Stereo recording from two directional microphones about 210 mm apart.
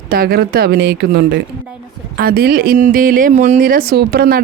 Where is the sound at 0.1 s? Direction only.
45° right (ahead or behind).